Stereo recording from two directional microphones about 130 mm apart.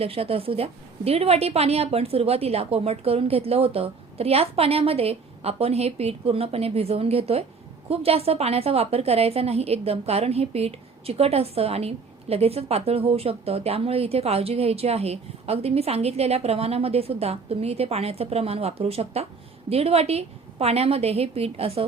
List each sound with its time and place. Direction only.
0.0 s a woman's voice: 50° right (ahead or behind)